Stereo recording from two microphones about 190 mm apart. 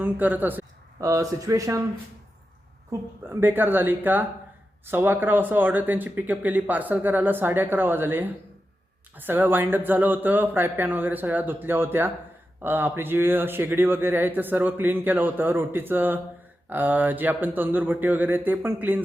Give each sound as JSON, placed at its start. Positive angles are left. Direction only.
{"t": 0.0, "sound": "speech", "side_deg": -10}
{"t": 3.2, "sound": "speech", "side_deg": -10}